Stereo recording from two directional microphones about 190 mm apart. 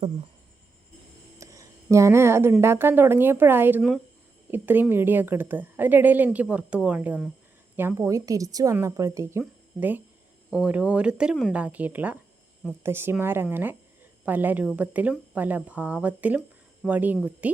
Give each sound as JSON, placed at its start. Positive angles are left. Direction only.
{"t": 1.4, "sound": "a woman's voice", "side_deg": -15}